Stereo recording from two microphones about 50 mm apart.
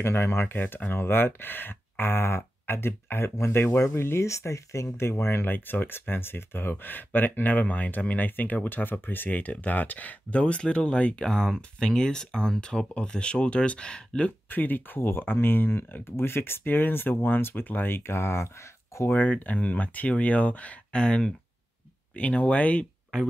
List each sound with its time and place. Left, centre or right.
0.0 s speech: left
0.6 s speech: left
4.3 s speech: left; by 14.3 s centre
14.5 s speech: left
18.3 s speech: left
19.0 s speech: left
20.9 s speech: centre